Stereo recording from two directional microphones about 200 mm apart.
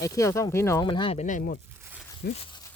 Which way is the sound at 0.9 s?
25° left (ahead or behind).